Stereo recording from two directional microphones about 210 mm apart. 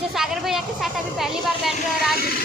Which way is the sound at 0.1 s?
Centre (ahead or behind).